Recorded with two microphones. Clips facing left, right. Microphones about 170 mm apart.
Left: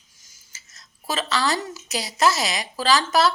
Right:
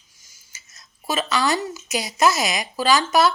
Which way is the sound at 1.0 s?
15° right (ahead or behind).